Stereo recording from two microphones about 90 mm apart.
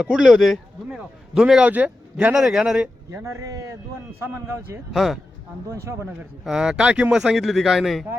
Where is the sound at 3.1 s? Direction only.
30° right (ahead or behind).